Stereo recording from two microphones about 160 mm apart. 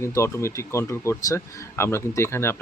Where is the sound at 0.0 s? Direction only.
15° left (ahead or behind).